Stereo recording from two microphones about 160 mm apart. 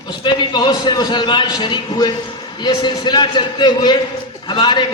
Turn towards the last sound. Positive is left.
turn(degrees=30)  # may be behind; listen again after turning